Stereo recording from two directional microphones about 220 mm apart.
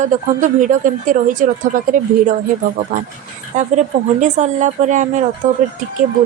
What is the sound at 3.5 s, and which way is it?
Speech, 35° right (ahead or behind).